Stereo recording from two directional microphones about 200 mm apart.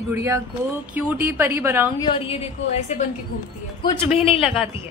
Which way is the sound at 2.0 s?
25° left (ahead or behind).